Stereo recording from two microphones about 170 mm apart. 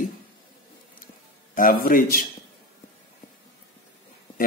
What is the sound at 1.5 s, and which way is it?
Speech, 55° left (ahead or behind).